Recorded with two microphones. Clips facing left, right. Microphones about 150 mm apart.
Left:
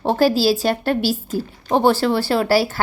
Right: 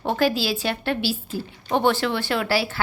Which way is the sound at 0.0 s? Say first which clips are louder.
Left 6 dB; 35° left (ahead or behind).